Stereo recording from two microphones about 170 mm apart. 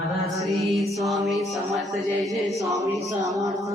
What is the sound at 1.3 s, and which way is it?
A woman's voice, centre (ahead or behind).